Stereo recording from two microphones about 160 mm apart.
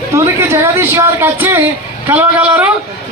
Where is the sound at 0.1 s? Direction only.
15° right (ahead or behind).